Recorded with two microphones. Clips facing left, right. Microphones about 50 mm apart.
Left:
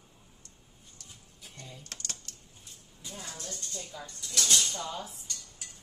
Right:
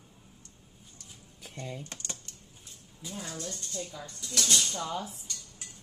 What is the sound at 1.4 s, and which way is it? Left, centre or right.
Typing, right.